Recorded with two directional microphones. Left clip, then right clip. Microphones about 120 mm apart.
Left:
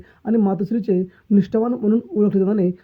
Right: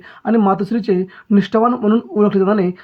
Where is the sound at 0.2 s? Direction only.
15° left (ahead or behind).